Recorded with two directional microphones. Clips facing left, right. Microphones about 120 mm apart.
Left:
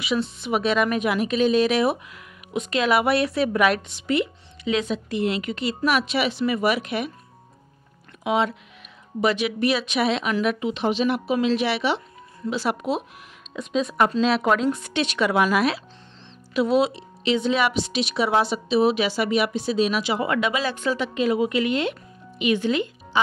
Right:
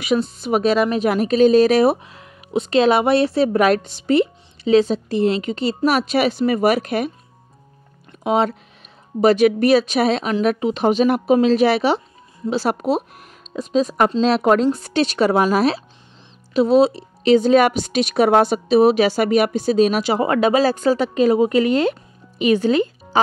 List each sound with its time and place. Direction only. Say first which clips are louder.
0.0 s a woman's voice: right 5 dB; 45° right (ahead or behind)
8.2 s a woman's voice: right 4 dB; 40° right (ahead or behind)